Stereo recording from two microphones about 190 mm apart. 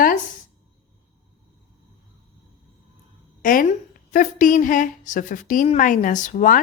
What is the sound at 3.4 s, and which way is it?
A woman's voice, 45° left (ahead or behind).